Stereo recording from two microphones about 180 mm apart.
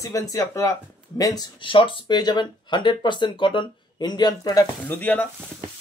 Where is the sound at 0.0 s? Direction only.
20° left (ahead or behind).